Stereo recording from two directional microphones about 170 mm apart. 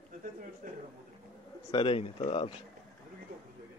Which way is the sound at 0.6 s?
50° right (ahead or behind).